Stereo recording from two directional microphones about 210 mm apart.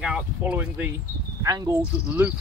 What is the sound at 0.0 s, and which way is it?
Speech, 5° right (ahead or behind).